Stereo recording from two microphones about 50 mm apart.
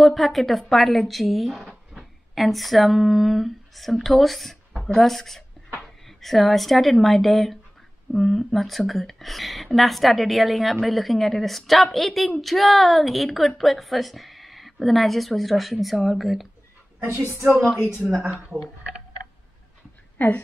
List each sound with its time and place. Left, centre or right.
0.0 s speech: centre
17.7 s speech: left
20.2 s a woman's voice: left